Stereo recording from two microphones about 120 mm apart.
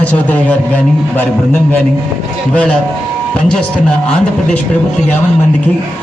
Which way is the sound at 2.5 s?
10° left (ahead or behind).